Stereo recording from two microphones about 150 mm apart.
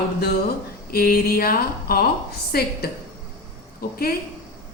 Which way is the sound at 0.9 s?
85° left.